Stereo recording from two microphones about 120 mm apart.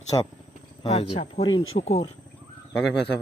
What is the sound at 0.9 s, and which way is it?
Speech, 55° left (ahead or behind).